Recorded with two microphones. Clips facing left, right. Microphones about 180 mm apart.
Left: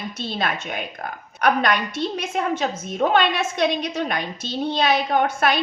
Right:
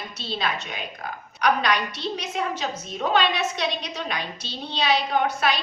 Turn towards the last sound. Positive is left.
turn(degrees=50)  # may be behind; listen again after turning